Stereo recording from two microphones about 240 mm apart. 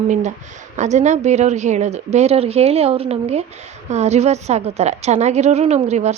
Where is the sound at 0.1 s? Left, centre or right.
Right.